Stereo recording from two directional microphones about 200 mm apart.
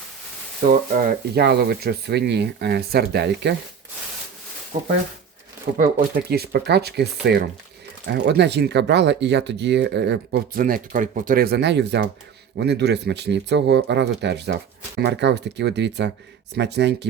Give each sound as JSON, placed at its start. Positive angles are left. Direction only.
{"t": 0.6, "sound": "speech", "side_deg": -45}
{"t": 5.7, "sound": "speech", "side_deg": -45}